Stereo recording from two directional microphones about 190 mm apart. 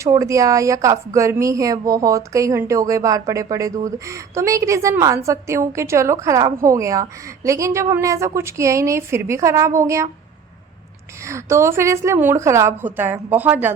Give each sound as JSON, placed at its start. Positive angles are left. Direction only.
{"t": 0.0, "sound": "speech", "side_deg": -15}
{"t": 11.2, "sound": "speech", "side_deg": -15}